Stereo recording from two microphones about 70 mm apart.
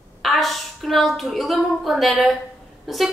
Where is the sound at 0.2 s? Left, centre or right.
Centre.